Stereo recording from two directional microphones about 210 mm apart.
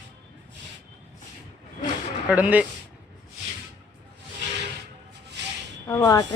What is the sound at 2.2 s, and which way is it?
Speech, 5° right (ahead or behind).